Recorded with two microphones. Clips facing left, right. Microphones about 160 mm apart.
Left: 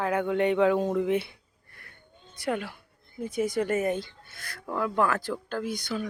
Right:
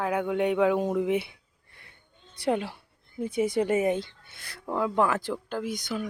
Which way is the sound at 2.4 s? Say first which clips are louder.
Right 3 dB; 30° right (ahead or behind).